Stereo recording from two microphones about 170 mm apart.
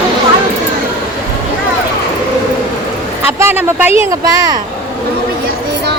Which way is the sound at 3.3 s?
10° right (ahead or behind).